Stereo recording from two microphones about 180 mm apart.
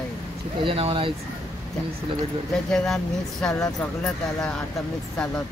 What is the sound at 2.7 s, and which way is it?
Speech, centre (ahead or behind).